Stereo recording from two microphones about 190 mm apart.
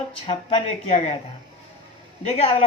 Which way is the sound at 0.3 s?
30° left (ahead or behind).